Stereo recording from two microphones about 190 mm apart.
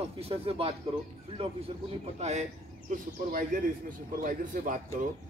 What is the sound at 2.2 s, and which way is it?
Speech, 35° right (ahead or behind).